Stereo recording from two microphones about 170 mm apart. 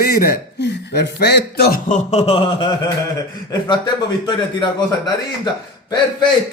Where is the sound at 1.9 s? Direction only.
40° left (ahead or behind).